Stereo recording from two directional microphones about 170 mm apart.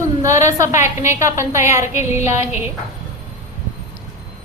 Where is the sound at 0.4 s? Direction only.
15° right (ahead or behind).